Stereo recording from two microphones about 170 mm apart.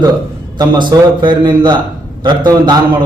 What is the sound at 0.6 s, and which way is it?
A man's voice, 25° right (ahead or behind).